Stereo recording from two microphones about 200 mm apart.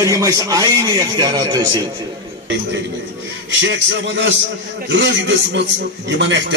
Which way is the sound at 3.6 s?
65° right (ahead or behind).